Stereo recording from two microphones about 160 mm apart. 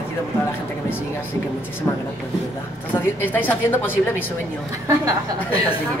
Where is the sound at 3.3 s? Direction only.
10° left (ahead or behind).